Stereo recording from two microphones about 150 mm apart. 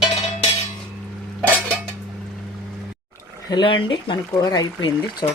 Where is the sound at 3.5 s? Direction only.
30° left (ahead or behind).